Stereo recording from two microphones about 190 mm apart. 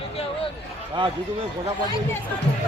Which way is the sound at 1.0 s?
25° right (ahead or behind).